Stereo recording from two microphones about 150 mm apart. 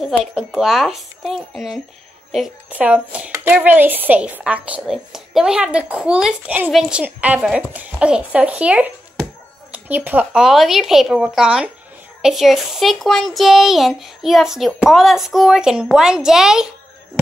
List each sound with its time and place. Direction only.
0.0 s a child's voice: 5° right (ahead or behind)
3.3 s a woman's voice: 20° right (ahead or behind); by 16.6 s 5° right (ahead or behind)